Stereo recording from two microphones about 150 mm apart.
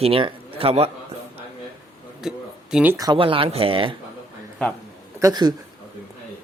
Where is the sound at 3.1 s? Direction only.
35° right (ahead or behind).